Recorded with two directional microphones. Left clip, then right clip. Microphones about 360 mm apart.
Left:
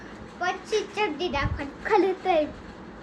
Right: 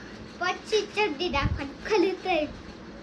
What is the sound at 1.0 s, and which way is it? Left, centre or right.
A child's voice, centre.